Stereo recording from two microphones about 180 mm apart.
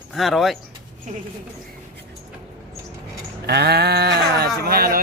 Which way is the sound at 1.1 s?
45° right (ahead or behind).